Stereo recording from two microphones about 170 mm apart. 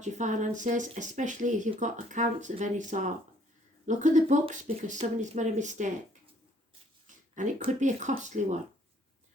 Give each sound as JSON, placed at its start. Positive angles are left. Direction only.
{"t": 0.0, "sound": "speech", "side_deg": -45}
{"t": 7.3, "sound": "speech", "side_deg": -45}